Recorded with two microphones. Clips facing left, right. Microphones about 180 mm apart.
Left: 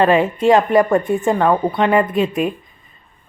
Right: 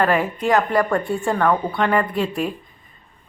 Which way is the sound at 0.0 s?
25° left (ahead or behind).